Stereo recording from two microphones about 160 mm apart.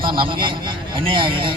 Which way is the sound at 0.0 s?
30° right (ahead or behind).